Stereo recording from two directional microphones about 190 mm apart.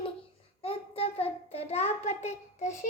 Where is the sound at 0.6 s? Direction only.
30° left (ahead or behind).